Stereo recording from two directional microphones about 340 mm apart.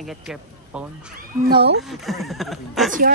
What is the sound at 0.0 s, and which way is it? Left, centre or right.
Speech, centre.